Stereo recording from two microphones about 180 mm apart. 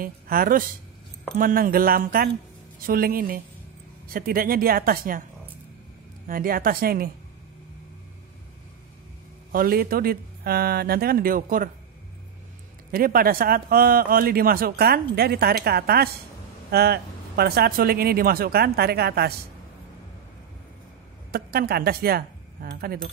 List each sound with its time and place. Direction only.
0.0 s speech: 55° right (ahead or behind)
6.2 s speech: 50° right (ahead or behind)
9.5 s speech: 55° right (ahead or behind)
12.9 s speech: 55° right (ahead or behind)
21.3 s a woman's voice: 60° right (ahead or behind)